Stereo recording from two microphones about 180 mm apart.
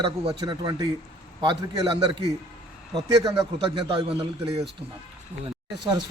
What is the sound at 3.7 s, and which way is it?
Speech, 30° right (ahead or behind).